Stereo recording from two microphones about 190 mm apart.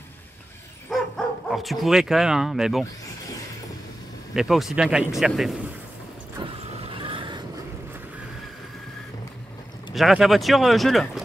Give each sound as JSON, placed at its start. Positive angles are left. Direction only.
{"t": 0.8, "sound": "speech", "side_deg": 0}
{"t": 4.3, "sound": "speech", "side_deg": 0}
{"t": 6.4, "sound": "vehicle", "side_deg": -25}
{"t": 9.9, "sound": "speech", "side_deg": 0}